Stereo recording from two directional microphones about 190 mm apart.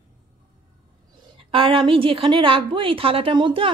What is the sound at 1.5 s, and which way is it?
A woman's voice, 25° right (ahead or behind).